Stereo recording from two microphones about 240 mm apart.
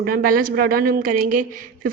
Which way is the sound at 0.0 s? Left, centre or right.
Right.